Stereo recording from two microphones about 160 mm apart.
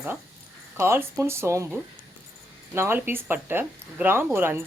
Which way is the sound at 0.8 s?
15° right (ahead or behind).